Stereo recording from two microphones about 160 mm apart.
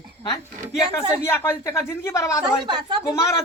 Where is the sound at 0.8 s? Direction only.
20° left (ahead or behind).